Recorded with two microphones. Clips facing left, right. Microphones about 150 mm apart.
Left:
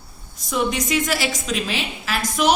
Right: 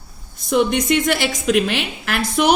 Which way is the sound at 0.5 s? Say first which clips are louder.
Right 5 dB; 60° right (ahead or behind).